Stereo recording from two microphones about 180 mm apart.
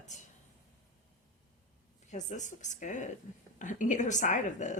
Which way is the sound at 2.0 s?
40° left (ahead or behind).